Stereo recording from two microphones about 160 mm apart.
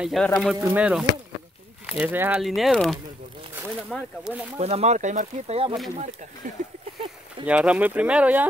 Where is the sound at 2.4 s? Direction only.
Centre (ahead or behind).